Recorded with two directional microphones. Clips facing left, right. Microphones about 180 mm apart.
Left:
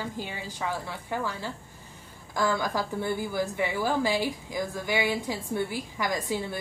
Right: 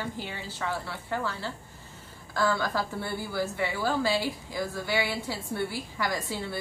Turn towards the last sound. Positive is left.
turn(degrees=20)  # may be behind; listen again after turning